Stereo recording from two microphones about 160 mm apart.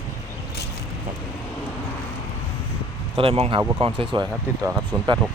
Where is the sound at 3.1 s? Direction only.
40° right (ahead or behind).